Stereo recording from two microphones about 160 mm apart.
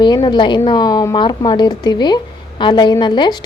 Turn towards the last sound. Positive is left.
turn(degrees=25)  # may be behind; listen again after turning